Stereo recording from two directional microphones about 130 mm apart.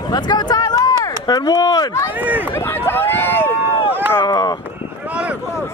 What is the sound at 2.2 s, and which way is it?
Speech, 15° right (ahead or behind).